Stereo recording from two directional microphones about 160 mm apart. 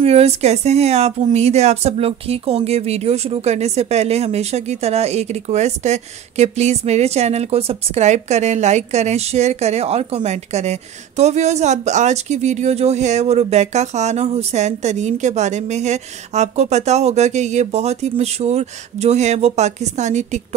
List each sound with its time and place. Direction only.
0.0 s a woman's voice: 40° right (ahead or behind)